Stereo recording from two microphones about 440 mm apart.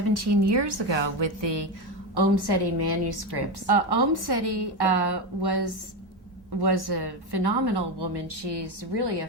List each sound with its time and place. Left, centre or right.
0.1 s a woman's voice: right